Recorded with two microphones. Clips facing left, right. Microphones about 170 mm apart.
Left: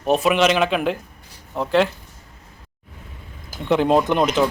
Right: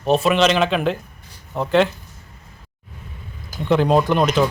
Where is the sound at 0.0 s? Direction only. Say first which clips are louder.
Right 1 dB; 15° left (ahead or behind).